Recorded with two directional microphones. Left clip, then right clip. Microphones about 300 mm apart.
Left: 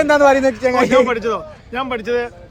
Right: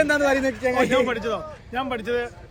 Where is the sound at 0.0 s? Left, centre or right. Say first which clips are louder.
Left 8 dB; left.